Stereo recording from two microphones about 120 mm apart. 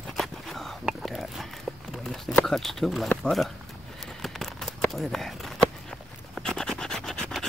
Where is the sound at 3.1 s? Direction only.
5° left (ahead or behind).